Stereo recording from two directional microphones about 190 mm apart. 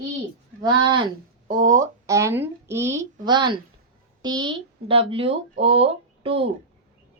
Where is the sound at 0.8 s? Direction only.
25° right (ahead or behind).